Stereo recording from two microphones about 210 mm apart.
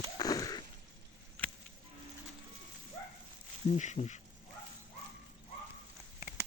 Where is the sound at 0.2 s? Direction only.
15° left (ahead or behind).